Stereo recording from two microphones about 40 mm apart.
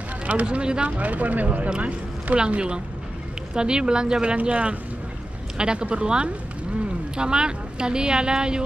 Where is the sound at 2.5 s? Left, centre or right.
Right.